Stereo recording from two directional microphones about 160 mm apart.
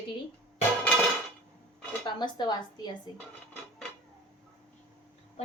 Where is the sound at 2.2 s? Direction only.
25° left (ahead or behind).